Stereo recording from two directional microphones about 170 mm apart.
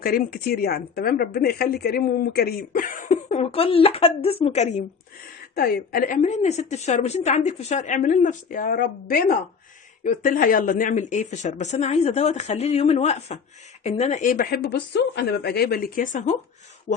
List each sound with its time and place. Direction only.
0.0 s a woman's voice: 60° left (ahead or behind); by 4.8 s 40° left (ahead or behind)
5.5 s a woman's voice: 65° left (ahead or behind); by 16.4 s 50° left (ahead or behind)